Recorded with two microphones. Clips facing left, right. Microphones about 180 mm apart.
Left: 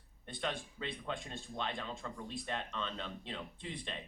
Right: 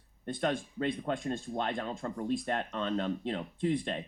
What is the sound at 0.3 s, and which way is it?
Speech, 45° right (ahead or behind).